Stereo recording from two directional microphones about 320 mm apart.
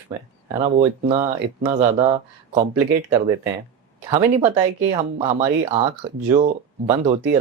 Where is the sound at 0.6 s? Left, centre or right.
Centre.